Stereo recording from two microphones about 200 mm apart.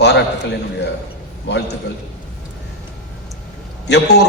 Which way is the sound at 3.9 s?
55° left (ahead or behind).